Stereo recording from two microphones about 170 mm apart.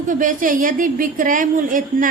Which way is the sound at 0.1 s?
50° right (ahead or behind).